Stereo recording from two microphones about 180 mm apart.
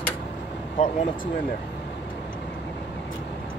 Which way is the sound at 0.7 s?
45° left (ahead or behind).